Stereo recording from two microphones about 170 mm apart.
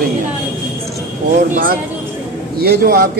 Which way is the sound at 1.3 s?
50° right (ahead or behind).